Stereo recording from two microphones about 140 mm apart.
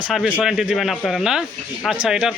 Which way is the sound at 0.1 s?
5° right (ahead or behind).